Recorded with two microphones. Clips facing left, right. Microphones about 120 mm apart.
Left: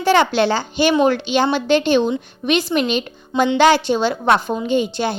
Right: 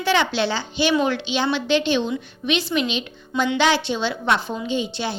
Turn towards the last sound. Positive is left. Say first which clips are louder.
# left 6 dB
turn(degrees=50)  # may be behind; listen again after turning